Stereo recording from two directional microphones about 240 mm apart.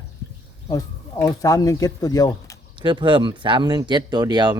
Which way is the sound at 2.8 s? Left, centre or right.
Centre.